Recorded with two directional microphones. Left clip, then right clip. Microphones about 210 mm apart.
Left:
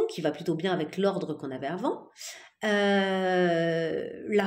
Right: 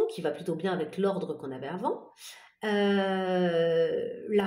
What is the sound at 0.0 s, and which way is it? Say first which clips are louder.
Speech: left 1 dB; 30° left (ahead or behind).